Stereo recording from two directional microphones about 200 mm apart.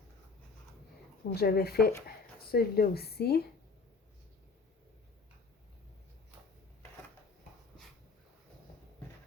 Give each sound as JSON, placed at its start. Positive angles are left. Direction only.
{"t": 1.3, "sound": "speech", "side_deg": 50}